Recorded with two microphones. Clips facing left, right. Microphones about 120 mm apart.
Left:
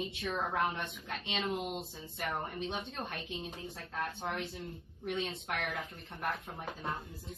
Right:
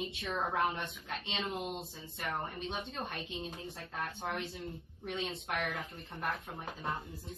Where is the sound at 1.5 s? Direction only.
25° right (ahead or behind).